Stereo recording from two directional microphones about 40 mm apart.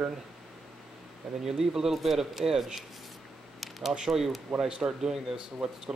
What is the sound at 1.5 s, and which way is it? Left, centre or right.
Speech, centre.